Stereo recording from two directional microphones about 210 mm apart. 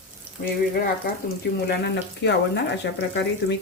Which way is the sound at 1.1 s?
45° left (ahead or behind).